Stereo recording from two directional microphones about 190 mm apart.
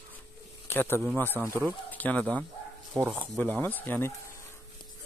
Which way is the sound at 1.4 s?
15° right (ahead or behind).